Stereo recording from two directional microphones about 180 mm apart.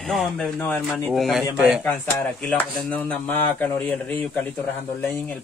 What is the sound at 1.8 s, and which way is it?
Speech, 10° left (ahead or behind).